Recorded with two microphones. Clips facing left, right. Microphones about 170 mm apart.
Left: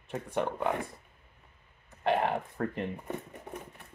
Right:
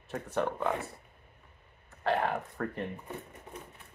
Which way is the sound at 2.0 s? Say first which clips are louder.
Left 2 dB; 20° left (ahead or behind).